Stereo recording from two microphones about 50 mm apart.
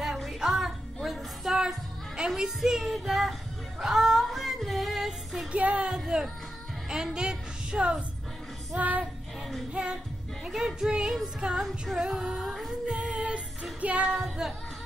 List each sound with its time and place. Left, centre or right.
0.0 s music: centre
3.8 s female singing: centre
5.5 s music: right
5.9 s speech: centre
6.9 s a sound: centre
8.7 s music: right
10.4 s music: centre
12.4 s singing: centre
12.8 s music: centre
14.1 s music: centre